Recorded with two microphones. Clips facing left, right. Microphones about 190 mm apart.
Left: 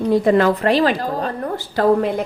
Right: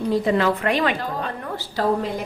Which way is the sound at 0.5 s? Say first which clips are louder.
Left 5 dB; 35° left (ahead or behind).